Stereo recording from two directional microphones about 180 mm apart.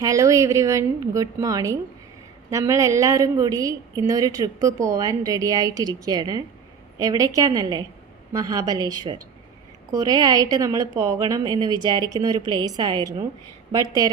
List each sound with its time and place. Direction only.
0.0 s a woman's voice: 20° right (ahead or behind)